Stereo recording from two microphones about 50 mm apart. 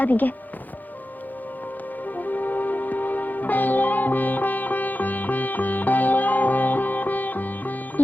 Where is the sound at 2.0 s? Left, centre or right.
Left.